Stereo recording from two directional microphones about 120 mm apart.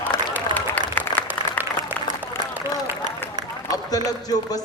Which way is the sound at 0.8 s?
15° left (ahead or behind).